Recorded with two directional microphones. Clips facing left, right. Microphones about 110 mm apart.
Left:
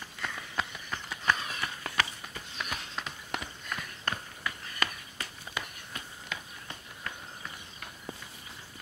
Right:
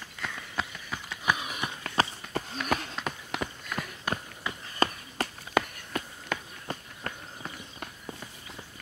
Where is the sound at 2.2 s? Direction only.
5° left (ahead or behind).